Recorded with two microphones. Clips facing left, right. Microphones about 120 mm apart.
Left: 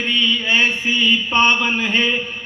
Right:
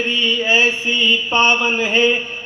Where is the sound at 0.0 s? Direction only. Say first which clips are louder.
Right 3 dB; 35° right (ahead or behind).